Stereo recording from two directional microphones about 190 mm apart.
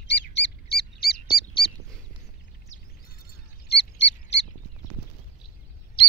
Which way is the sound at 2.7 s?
35° left (ahead or behind).